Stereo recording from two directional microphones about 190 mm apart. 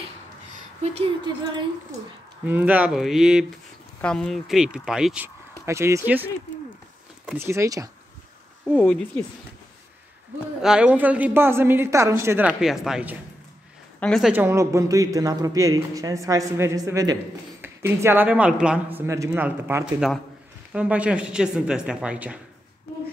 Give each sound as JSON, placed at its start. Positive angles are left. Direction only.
{"t": 2.4, "sound": "a man's voice", "side_deg": -10}
{"t": 7.3, "sound": "a man's voice", "side_deg": -15}
{"t": 8.7, "sound": "speech", "side_deg": 5}
{"t": 10.6, "sound": "a man's voice", "side_deg": -5}
{"t": 13.9, "sound": "speech", "side_deg": 5}
{"t": 14.3, "sound": "a man's voice", "side_deg": -10}